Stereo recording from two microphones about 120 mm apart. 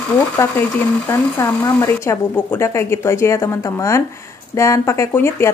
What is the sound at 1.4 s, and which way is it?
Speech, 25° left (ahead or behind).